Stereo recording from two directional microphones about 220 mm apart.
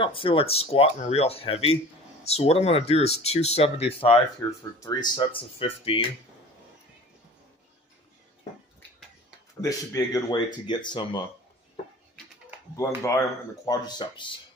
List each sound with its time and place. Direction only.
0.0 s speech: 25° left (ahead or behind)
4.4 s speech: 15° left (ahead or behind)
9.6 s speech: 15° left (ahead or behind)
12.7 s speech: 15° left (ahead or behind)